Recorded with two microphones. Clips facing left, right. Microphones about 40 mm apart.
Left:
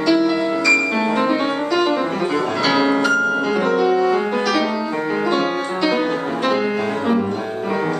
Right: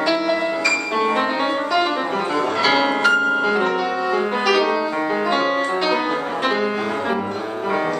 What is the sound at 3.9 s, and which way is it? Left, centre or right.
Music, centre.